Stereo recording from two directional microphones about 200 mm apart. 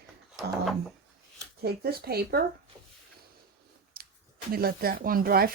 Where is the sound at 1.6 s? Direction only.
50° right (ahead or behind).